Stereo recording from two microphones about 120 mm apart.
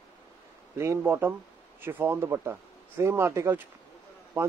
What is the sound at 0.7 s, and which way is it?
Speech, 25° right (ahead or behind).